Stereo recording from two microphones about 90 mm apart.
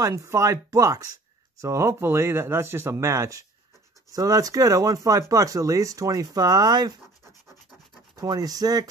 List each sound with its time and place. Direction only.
0.0 s speech: 35° right (ahead or behind)
8.2 s speech: 45° right (ahead or behind)